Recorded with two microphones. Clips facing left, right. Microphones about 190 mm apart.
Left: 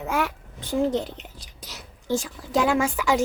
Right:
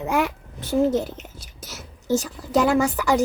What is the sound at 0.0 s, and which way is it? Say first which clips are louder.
A child's voice: right 3 dB; 15° right (ahead or behind).